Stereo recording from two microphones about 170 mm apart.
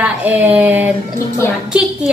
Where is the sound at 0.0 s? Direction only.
10° right (ahead or behind).